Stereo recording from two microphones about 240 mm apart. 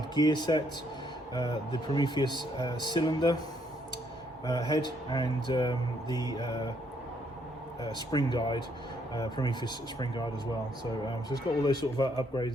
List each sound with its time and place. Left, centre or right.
0.1 s speech: centre
5.0 s speech: centre
8.1 s speech: centre